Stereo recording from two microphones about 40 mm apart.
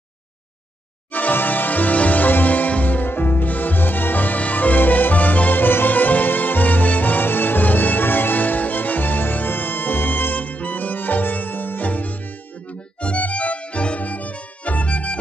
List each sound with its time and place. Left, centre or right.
1.1 s music: left
3.4 s music: left
13.0 s music: left